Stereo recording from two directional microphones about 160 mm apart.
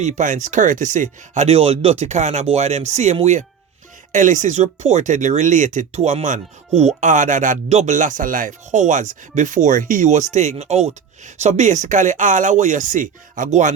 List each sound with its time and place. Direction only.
0.0 s speech: 55° right (ahead or behind)